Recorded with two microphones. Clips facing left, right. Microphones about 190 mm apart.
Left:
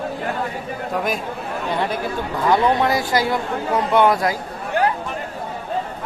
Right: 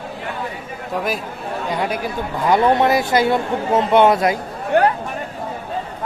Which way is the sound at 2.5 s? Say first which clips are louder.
Right 3 dB; 20° right (ahead or behind).